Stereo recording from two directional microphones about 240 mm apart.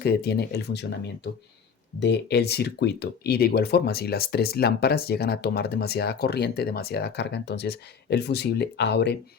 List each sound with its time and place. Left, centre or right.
0.0 s speech: left